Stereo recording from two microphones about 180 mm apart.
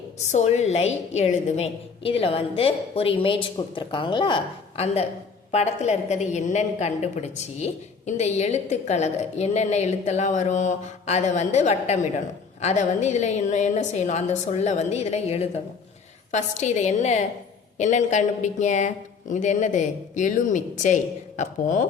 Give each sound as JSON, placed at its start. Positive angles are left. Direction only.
{"t": 0.3, "sound": "a woman's voice", "side_deg": 40}